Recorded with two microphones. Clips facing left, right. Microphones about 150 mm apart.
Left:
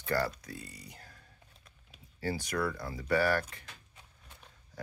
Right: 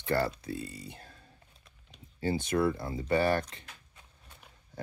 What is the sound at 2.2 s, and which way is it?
Speech, 25° right (ahead or behind).